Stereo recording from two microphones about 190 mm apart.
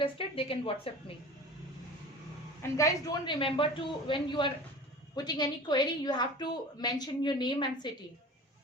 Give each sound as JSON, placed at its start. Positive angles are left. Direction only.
{"t": 0.0, "sound": "a woman's voice", "side_deg": 30}
{"t": 2.6, "sound": "a woman's voice", "side_deg": 15}